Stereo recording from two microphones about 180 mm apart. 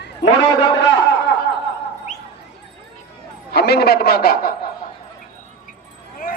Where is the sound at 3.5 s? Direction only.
60° left (ahead or behind).